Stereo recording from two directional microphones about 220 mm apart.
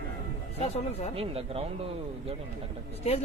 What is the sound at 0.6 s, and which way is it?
Speech, 30° left (ahead or behind).